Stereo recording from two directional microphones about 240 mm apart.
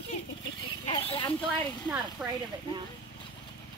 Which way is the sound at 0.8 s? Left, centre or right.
Left.